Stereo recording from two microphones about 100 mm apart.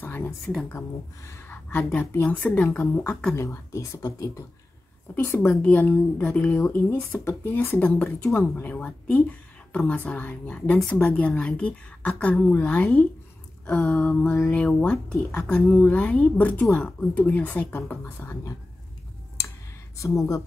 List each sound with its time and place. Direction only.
0.0 s a sound: 20° left (ahead or behind)
0.7 s speech: 30° left (ahead or behind); by 2.9 s 15° left (ahead or behind)
3.3 s speech: 30° left (ahead or behind)
5.1 s a woman's voice: 20° left (ahead or behind)
6.6 s a woman's voice: 25° left (ahead or behind)